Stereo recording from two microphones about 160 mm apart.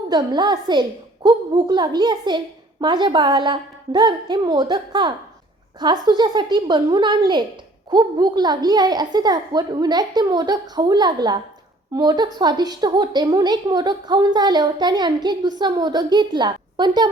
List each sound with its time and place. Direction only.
0.1 s a woman's voice: 25° right (ahead or behind)